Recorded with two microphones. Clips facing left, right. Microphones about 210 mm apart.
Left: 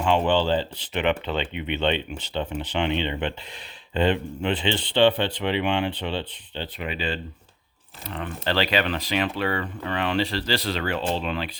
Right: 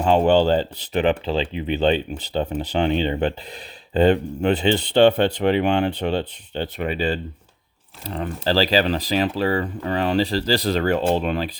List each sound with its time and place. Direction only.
0.0 s speech: 40° right (ahead or behind)